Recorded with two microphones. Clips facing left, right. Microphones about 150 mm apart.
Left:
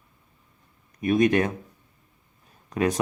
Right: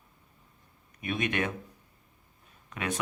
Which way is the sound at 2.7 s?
40° left (ahead or behind).